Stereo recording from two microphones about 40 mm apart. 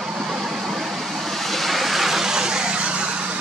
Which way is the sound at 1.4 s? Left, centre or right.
Centre.